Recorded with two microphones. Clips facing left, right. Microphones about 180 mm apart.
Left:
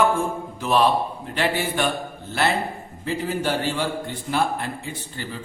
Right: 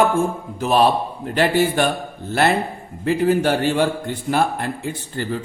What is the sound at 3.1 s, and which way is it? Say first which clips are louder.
A man's voice: right 8 dB; 55° right (ahead or behind).